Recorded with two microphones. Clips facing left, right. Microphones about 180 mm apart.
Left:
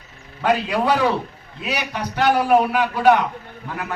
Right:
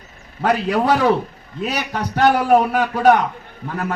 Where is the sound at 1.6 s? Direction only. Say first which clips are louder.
Right 3 dB; 45° right (ahead or behind).